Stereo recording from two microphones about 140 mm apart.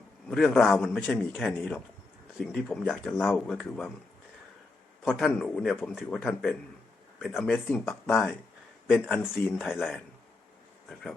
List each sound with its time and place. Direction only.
0.3 s speech: centre (ahead or behind)
5.0 s speech: centre (ahead or behind)